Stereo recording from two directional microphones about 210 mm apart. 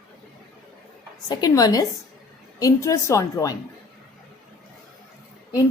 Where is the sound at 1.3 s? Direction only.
20° left (ahead or behind).